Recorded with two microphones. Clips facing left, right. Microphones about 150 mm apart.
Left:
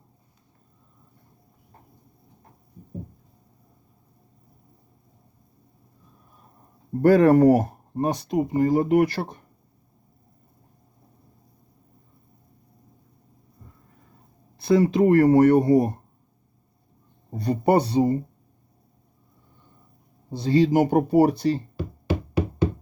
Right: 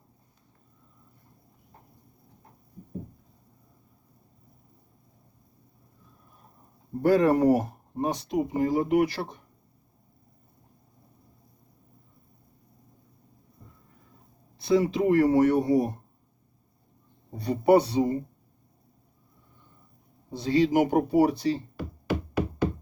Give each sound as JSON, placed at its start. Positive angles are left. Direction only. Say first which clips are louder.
{"t": 7.0, "sound": "speech", "louder": "left 5 dB", "side_deg": 60}
{"t": 14.6, "sound": "speech", "louder": "left 4 dB", "side_deg": 50}
{"t": 17.3, "sound": "speech", "louder": "even", "side_deg": 45}
{"t": 20.3, "sound": "speech", "louder": "left 3 dB", "side_deg": 35}
{"t": 22.4, "sound": "a sound", "louder": "left 4 dB", "side_deg": 25}